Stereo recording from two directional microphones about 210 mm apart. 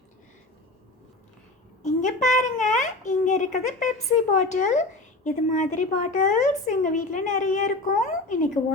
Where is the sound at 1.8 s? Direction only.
35° left (ahead or behind).